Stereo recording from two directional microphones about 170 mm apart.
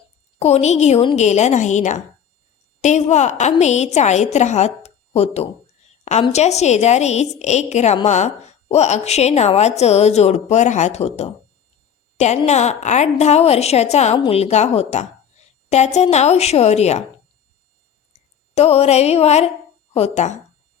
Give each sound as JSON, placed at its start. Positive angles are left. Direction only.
{"t": 0.3, "sound": "a woman's voice", "side_deg": 40}
{"t": 18.1, "sound": "a woman's voice", "side_deg": 40}